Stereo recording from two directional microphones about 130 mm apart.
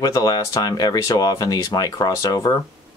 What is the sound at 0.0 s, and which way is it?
Speech, 30° left (ahead or behind).